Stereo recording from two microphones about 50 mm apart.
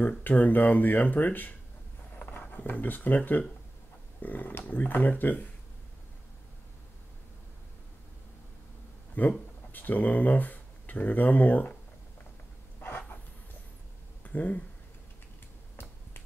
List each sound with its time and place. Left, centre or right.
0.2 s speech: left
2.7 s speech: left
4.2 s speech: left
9.2 s speech: left
12.8 s a sound: left
14.2 s speech: left